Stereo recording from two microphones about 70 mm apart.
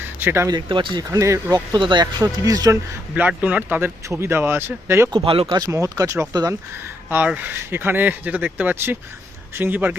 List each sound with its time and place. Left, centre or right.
0.0 s a sound: right
0.5 s speech: right
1.2 s speech: right
1.5 s speech: right
3.2 s speech: right
3.8 s speech: right
5.1 s speech: right
5.6 s speech: right
7.3 s speech: right